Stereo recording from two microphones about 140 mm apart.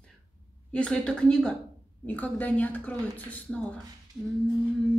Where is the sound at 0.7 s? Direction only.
5° left (ahead or behind).